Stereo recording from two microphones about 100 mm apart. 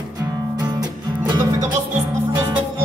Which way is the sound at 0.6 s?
45° right (ahead or behind).